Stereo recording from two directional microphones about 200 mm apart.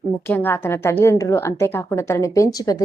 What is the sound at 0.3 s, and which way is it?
A woman's voice, 10° left (ahead or behind).